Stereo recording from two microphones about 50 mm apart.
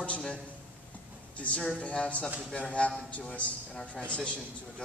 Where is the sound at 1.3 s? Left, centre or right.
Left.